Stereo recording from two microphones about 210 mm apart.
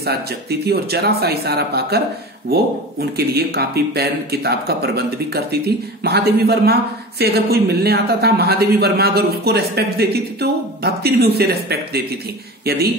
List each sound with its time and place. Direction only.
0.0 s a man's voice: 50° right (ahead or behind)